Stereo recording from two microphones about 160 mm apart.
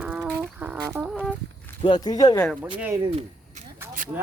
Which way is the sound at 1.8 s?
30° left (ahead or behind).